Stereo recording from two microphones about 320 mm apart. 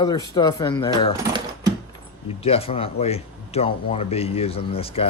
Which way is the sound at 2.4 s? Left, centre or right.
Centre.